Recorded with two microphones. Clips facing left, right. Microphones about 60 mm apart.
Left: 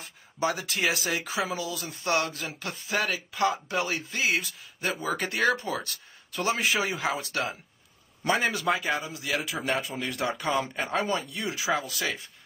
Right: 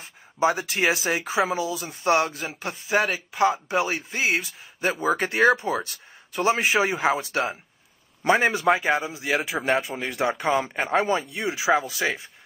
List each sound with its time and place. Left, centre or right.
0.0 s a man's voice: right